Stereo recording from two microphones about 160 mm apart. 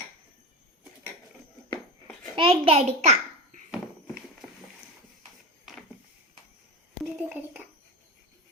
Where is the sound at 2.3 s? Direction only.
35° right (ahead or behind).